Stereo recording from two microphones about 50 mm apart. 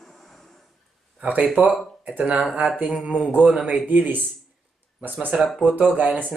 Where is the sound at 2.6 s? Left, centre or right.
Right.